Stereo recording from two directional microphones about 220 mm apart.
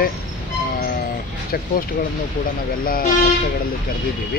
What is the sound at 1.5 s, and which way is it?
Speech, 45° left (ahead or behind).